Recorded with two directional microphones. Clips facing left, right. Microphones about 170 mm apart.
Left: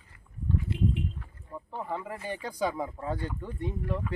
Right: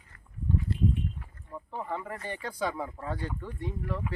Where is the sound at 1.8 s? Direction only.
10° left (ahead or behind).